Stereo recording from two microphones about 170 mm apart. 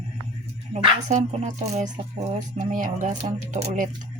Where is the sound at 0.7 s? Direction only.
45° right (ahead or behind).